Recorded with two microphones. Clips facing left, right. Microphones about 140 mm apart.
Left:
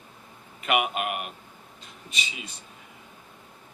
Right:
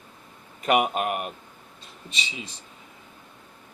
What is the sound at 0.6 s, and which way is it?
Speech, 40° right (ahead or behind).